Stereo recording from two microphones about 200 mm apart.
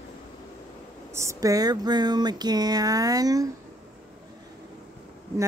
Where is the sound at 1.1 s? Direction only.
15° right (ahead or behind).